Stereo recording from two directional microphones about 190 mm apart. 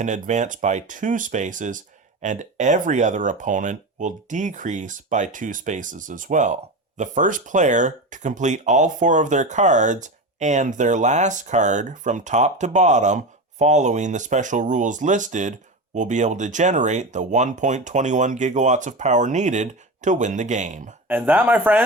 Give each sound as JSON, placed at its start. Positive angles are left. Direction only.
{"t": 0.0, "sound": "speech", "side_deg": -40}
{"t": 21.1, "sound": "speech", "side_deg": -10}